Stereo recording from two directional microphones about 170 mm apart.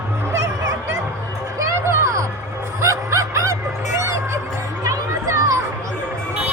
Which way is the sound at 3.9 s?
15° right (ahead or behind).